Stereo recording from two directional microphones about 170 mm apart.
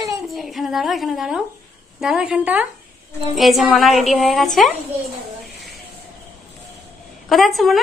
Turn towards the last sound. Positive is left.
turn(degrees=0)  # may be behind; listen again after turning